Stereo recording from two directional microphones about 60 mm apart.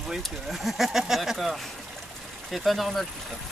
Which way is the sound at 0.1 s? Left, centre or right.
Centre.